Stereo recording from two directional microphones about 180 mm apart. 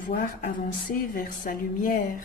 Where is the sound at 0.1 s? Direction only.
55° left (ahead or behind).